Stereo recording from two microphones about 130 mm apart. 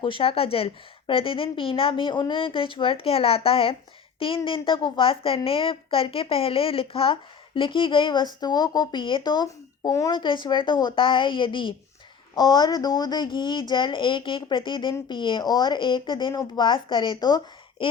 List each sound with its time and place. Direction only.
0.0 s a woman's voice: 40° left (ahead or behind)
16.3 s a woman's voice: 25° left (ahead or behind)
16.6 s speech: 40° left (ahead or behind)